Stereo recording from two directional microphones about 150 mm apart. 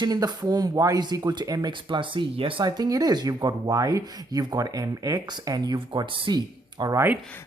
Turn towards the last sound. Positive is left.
turn(degrees=-25)  # may be behind; listen again after turning